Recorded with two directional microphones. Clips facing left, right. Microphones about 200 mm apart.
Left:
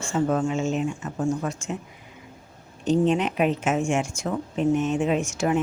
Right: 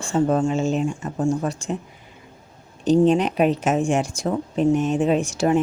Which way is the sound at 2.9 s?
35° right (ahead or behind).